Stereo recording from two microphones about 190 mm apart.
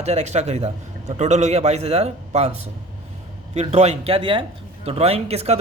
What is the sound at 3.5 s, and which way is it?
A man's voice, 35° right (ahead or behind).